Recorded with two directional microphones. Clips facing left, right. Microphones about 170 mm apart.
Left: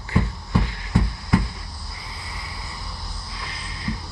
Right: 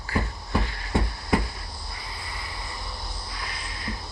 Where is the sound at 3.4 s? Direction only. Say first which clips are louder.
Left 4 dB; 30° left (ahead or behind).